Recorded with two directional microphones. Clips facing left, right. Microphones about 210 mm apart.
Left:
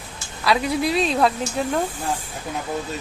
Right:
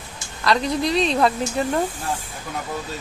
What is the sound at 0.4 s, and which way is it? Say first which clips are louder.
Speech: even; 5° left (ahead or behind).